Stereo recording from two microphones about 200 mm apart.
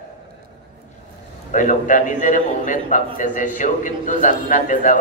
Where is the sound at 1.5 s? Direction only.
40° left (ahead or behind).